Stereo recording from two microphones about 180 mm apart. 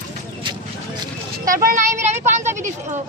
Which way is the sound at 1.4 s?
50° right (ahead or behind).